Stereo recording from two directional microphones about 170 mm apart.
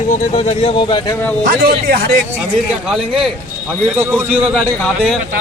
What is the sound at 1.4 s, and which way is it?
Speech, 65° right (ahead or behind).